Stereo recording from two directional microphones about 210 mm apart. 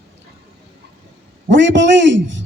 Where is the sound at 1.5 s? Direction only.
60° right (ahead or behind).